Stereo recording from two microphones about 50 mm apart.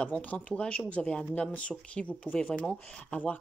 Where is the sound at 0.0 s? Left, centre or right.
Left.